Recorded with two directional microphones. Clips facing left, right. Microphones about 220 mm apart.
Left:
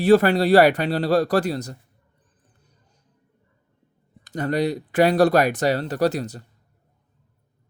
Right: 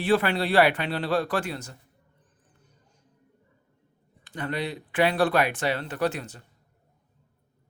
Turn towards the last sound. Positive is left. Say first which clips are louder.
# left 6 dB
turn(degrees=40)  # may be behind; listen again after turning